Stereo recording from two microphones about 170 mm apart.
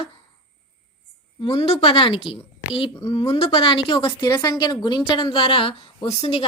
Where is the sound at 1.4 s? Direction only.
30° left (ahead or behind).